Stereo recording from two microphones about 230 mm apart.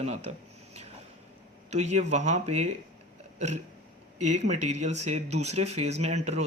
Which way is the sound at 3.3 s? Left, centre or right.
Right.